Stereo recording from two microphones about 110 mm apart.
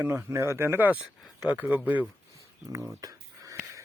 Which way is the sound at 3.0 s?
30° right (ahead or behind).